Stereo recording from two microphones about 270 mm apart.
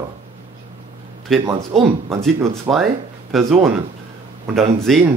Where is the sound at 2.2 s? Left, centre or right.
Centre.